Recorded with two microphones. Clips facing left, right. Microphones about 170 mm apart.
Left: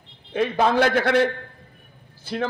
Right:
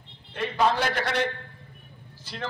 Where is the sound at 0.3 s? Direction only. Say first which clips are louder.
Left 4 dB; 50° left (ahead or behind).